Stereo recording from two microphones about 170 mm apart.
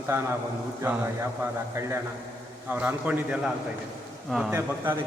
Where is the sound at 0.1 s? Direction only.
15° right (ahead or behind).